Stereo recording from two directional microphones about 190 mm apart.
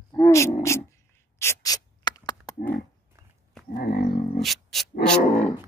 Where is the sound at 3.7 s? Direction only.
55° left (ahead or behind).